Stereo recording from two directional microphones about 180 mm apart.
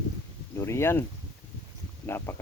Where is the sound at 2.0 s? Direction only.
15° left (ahead or behind).